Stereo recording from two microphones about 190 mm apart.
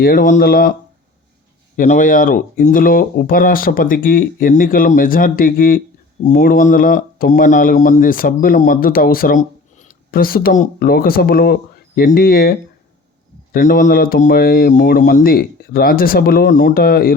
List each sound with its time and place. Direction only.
0.0 s speech: 45° left (ahead or behind)
1.7 s speech: 45° left (ahead or behind)